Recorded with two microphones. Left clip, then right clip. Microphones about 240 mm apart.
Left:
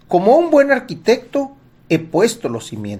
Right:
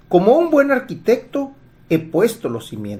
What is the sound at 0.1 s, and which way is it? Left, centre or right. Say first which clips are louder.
Speech: left 2 dB; left.